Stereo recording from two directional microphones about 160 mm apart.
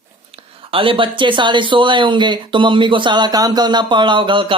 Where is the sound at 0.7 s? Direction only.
35° right (ahead or behind).